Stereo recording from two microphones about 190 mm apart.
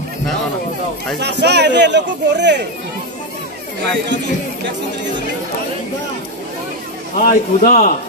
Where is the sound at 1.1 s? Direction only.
60° right (ahead or behind).